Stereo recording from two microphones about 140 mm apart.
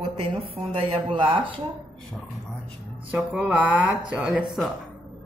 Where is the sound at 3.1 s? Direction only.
5° right (ahead or behind).